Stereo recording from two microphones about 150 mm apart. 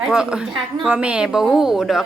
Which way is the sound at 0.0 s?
5° right (ahead or behind).